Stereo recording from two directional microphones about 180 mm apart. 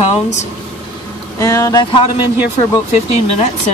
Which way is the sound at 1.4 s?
20° left (ahead or behind).